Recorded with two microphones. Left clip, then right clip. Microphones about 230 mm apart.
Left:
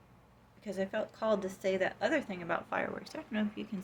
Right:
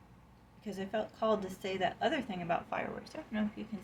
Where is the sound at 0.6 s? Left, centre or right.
Left.